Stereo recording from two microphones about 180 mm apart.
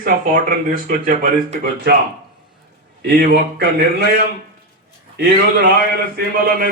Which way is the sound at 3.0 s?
65° right (ahead or behind).